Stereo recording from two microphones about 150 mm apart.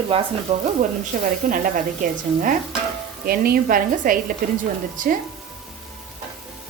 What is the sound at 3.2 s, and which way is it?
A woman's voice, 75° right (ahead or behind).